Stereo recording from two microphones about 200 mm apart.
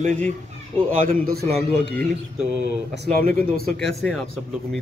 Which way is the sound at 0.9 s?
45° right (ahead or behind).